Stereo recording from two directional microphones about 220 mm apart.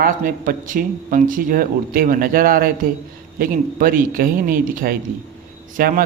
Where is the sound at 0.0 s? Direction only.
40° right (ahead or behind).